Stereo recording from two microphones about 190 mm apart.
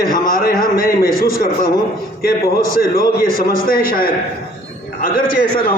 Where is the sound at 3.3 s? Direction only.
50° left (ahead or behind).